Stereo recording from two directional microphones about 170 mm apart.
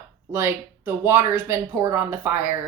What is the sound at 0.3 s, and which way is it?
Speech, 15° right (ahead or behind).